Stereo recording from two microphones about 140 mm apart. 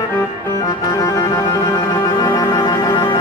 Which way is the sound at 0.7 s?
25° left (ahead or behind).